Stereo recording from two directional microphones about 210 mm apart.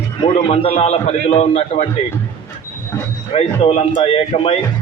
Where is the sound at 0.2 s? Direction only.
30° left (ahead or behind).